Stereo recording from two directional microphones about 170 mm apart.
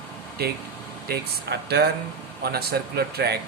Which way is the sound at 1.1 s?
75° right (ahead or behind).